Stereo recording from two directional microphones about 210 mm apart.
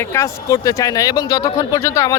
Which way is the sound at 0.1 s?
15° left (ahead or behind).